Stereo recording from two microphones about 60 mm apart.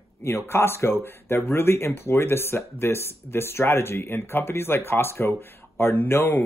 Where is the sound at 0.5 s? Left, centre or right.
Left.